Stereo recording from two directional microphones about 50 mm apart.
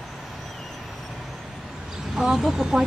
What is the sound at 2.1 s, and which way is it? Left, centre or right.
Speech, centre.